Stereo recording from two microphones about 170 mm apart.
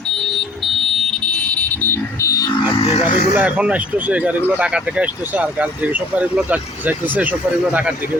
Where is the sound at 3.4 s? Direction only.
10° right (ahead or behind).